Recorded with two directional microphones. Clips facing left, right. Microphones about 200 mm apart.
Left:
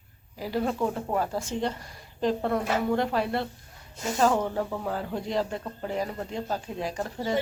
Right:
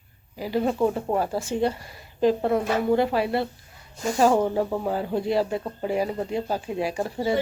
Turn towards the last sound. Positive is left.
turn(degrees=-10)  # may be behind; listen again after turning